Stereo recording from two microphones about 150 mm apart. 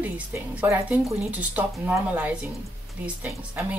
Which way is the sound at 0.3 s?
10° right (ahead or behind).